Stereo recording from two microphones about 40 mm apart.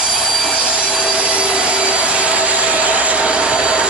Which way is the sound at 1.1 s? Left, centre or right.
Right.